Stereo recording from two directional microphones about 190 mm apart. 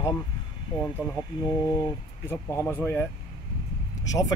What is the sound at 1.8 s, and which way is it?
Speech, 15° left (ahead or behind).